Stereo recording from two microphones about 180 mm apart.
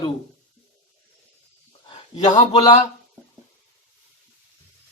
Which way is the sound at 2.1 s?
25° left (ahead or behind).